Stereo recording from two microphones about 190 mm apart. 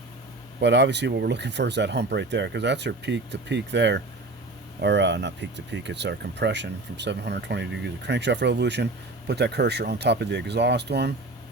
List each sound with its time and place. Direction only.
0.6 s speech: 65° right (ahead or behind)